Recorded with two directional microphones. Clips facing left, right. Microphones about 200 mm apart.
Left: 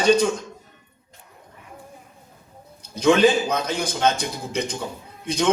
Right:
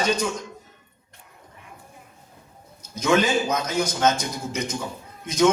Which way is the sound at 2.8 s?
30° left (ahead or behind).